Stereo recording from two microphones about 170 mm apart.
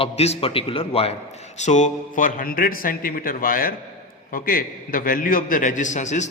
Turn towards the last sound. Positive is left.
turn(degrees=45)  # may be behind; listen again after turning